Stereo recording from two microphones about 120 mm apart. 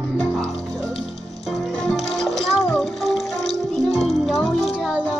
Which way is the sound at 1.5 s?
5° left (ahead or behind).